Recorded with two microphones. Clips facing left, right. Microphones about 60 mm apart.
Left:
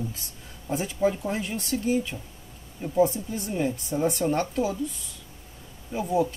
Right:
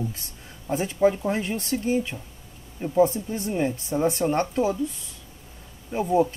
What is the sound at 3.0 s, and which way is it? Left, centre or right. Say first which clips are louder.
Speech: right 2 dB; right.